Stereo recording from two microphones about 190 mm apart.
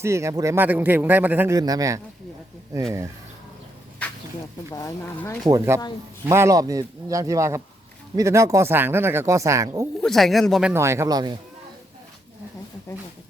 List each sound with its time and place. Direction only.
0.0 s speech: 15° right (ahead or behind)
4.7 s speech: 20° left (ahead or behind)
5.5 s speech: 15° right (ahead or behind)
10.0 s speech: centre (ahead or behind); by 11.3 s 20° right (ahead or behind)